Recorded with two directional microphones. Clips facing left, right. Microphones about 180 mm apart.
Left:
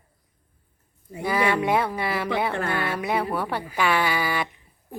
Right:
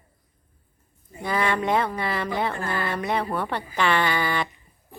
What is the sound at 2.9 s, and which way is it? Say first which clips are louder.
Speech: left 1 dB; 5° left (ahead or behind).